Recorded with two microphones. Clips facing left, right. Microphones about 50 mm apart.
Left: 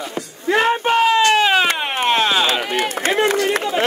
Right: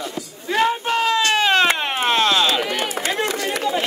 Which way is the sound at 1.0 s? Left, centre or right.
Left.